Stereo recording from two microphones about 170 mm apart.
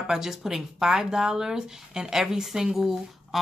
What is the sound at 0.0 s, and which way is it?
Speech, 5° right (ahead or behind).